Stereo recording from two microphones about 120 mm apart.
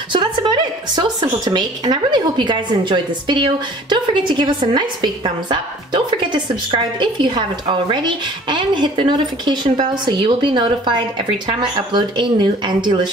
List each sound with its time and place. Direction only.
0.1 s a woman's voice: 40° right (ahead or behind)